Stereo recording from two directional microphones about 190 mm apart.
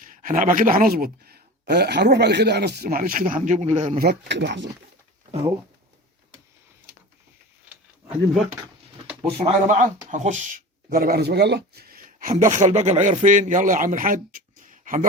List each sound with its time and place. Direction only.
0.0 s speech: 45° right (ahead or behind)
4.0 s speech: 60° right (ahead or behind)
9.4 s speech: 35° right (ahead or behind)